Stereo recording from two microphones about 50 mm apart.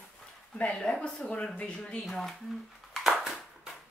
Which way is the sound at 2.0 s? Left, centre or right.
Centre.